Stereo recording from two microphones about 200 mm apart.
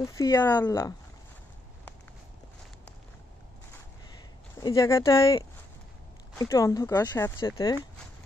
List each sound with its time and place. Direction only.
0.0 s speech: 15° left (ahead or behind)
4.6 s speech: 15° left (ahead or behind)